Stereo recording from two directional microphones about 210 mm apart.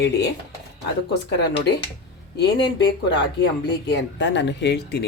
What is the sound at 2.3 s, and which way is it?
Speech, 55° left (ahead or behind).